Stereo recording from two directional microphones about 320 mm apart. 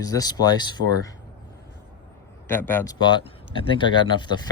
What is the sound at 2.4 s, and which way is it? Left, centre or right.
Speech, centre.